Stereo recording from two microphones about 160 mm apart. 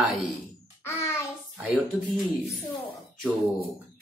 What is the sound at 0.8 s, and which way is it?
Music, 15° left (ahead or behind).